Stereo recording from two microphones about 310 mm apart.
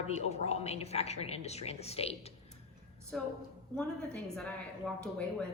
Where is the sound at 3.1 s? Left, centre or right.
Centre.